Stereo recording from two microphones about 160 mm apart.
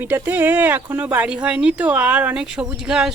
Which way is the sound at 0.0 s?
10° right (ahead or behind).